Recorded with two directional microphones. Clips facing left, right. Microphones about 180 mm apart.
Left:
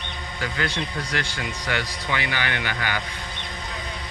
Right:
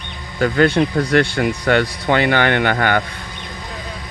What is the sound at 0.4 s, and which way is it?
Speech, 65° right (ahead or behind).